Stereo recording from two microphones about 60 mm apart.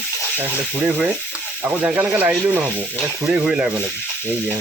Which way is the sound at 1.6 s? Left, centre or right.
Right.